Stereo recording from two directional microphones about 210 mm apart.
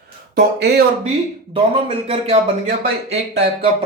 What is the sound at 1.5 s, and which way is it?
Speech, 25° right (ahead or behind).